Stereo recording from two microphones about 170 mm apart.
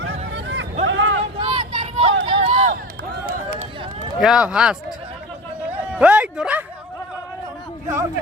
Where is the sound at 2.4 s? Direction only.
45° right (ahead or behind).